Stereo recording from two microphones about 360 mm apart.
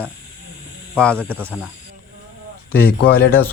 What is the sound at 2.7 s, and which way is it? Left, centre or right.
Speech, left.